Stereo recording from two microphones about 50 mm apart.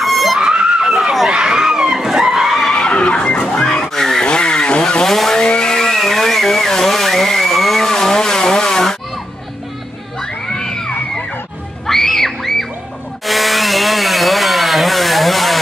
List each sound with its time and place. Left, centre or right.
0.0 s neigh: centre
0.4 s a sound: centre
2.5 s vehicle: centre
2.8 s vehicle: centre
3.5 s a sound: centre
3.9 s vehicle: centre
10.2 s screaming: centre
11.8 s music: centre
13.2 s wood: centre